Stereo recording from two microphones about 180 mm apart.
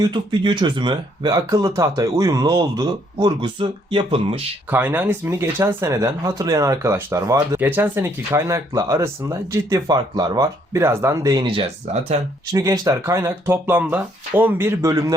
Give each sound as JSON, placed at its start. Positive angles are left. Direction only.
{"t": 0.0, "sound": "speech", "side_deg": -25}
{"t": 4.7, "sound": "speech", "side_deg": -10}
{"t": 12.5, "sound": "speech", "side_deg": -20}